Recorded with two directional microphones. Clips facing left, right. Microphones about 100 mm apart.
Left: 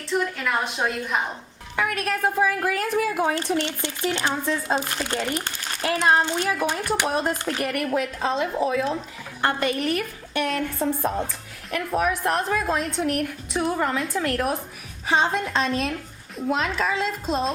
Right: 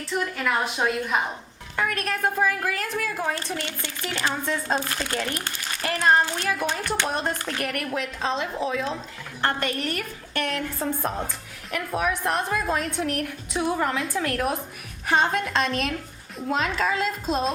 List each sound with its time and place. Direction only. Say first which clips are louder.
0.1 s a woman's voice: left 1 dB; centre (ahead or behind)
3.2 s a woman's voice: left 5 dB; 20° left (ahead or behind); by 17.5 s centre (ahead or behind)